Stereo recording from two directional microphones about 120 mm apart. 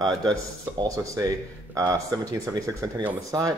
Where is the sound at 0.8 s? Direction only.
30° right (ahead or behind).